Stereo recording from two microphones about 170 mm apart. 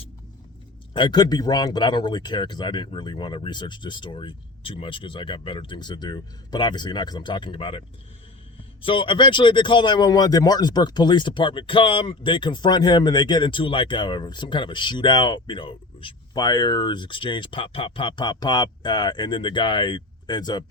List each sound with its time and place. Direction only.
0.9 s speech: 25° left (ahead or behind)
8.8 s speech: 30° left (ahead or behind)